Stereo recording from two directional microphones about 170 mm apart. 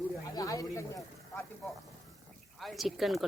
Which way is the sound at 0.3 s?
20° left (ahead or behind).